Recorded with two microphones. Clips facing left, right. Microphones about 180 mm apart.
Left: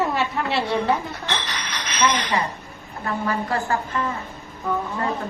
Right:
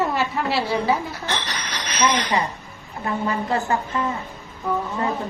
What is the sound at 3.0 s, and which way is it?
A woman's voice, 20° right (ahead or behind).